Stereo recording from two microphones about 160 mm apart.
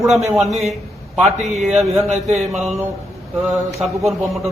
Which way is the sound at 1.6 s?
Centre (ahead or behind).